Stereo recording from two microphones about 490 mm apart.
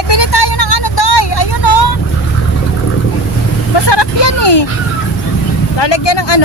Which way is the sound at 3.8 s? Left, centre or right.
Left.